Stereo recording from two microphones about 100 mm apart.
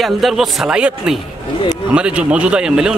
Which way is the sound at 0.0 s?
Centre (ahead or behind).